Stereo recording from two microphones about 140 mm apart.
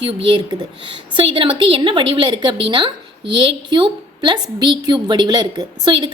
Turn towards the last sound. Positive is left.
turn(degrees=-30)  # may be behind; listen again after turning